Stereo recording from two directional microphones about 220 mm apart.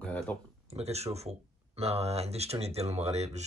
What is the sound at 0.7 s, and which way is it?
Speech, 30° right (ahead or behind).